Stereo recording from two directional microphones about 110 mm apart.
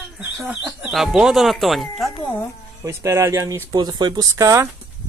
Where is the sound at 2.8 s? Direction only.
25° right (ahead or behind).